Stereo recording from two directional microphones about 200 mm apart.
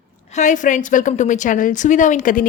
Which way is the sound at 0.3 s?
40° left (ahead or behind).